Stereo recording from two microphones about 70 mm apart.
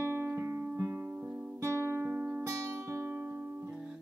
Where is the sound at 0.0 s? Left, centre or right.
Right.